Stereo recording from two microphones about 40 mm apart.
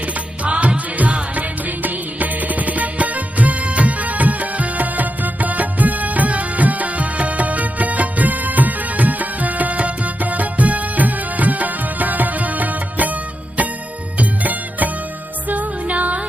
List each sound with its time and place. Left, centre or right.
0.4 s music: right
14.2 s music: right